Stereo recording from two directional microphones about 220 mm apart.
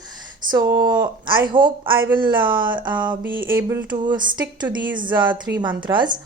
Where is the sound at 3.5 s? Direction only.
10° right (ahead or behind).